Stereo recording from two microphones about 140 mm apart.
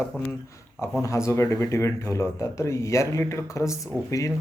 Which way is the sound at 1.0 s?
20° left (ahead or behind).